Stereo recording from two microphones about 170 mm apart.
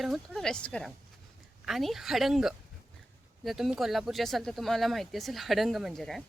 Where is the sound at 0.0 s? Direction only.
Centre (ahead or behind).